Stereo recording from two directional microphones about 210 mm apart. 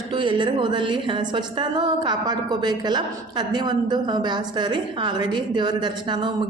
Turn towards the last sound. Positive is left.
turn(degrees=-20)  # may be behind; listen again after turning